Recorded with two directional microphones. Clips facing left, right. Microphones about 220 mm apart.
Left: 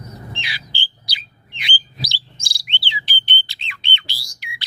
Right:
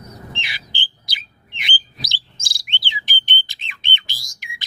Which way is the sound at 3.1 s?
45° right (ahead or behind).